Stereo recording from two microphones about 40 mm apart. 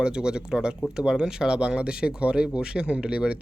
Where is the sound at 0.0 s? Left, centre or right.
Right.